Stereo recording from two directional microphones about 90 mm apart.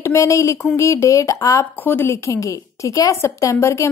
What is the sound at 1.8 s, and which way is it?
Speech, 20° left (ahead or behind).